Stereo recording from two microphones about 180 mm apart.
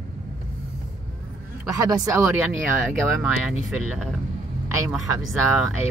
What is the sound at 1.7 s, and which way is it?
Speech, 20° right (ahead or behind).